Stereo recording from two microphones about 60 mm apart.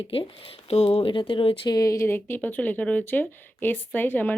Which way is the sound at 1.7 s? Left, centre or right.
Left.